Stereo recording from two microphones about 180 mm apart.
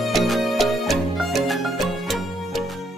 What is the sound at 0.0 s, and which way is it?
Music, centre (ahead or behind).